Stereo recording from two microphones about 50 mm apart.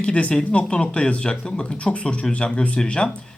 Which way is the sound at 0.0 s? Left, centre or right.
Left.